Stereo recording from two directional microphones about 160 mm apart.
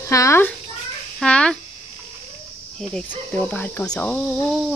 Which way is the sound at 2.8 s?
5° left (ahead or behind).